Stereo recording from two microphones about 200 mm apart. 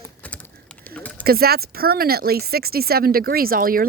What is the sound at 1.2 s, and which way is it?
Speech, 50° right (ahead or behind).